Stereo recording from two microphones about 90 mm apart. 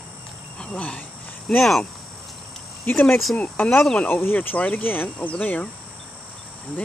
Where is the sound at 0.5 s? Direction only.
10° left (ahead or behind).